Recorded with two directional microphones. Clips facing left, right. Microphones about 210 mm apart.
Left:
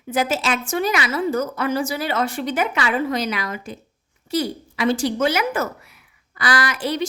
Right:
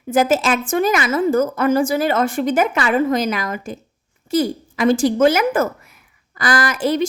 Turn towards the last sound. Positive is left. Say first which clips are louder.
# right 5 dB
turn(degrees=-50)  # may be behind; listen again after turning